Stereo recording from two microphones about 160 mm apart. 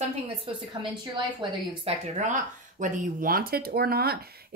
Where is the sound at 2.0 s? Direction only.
50° right (ahead or behind).